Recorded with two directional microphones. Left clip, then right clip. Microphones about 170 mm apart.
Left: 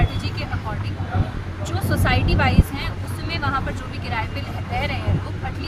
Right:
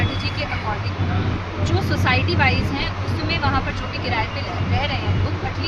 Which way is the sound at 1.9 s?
40° left (ahead or behind).